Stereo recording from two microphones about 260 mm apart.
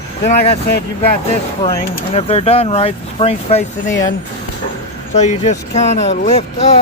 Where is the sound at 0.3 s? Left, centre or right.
Left.